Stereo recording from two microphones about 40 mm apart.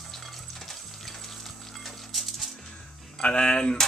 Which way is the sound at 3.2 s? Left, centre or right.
Left.